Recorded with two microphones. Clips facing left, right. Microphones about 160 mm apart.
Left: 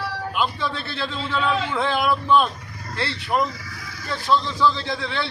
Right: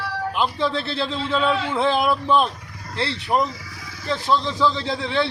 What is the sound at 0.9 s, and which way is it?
A man's voice, 25° right (ahead or behind).